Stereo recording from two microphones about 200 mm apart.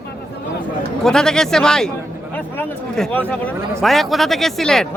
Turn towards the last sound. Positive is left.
turn(degrees=0)  # may be behind; listen again after turning